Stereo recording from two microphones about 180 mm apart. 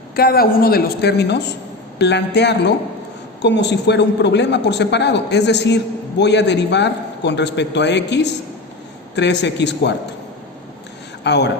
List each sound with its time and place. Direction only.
0.2 s a woman's voice: 55° left (ahead or behind); by 9.9 s 70° left (ahead or behind)
11.2 s a man's voice: 70° left (ahead or behind)